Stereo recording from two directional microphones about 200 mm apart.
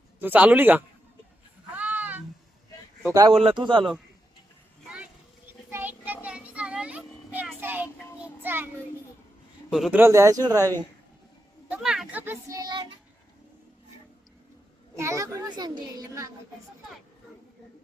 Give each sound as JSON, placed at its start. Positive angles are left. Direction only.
{"t": 0.2, "sound": "a child's voice", "side_deg": -10}
{"t": 1.7, "sound": "a sound", "side_deg": -10}
{"t": 3.1, "sound": "a child's voice", "side_deg": -20}
{"t": 5.7, "sound": "child singing", "side_deg": -10}
{"t": 9.6, "sound": "a child's voice", "side_deg": -5}
{"t": 11.7, "sound": "a child's voice", "side_deg": 0}
{"t": 14.9, "sound": "a child's voice", "side_deg": -15}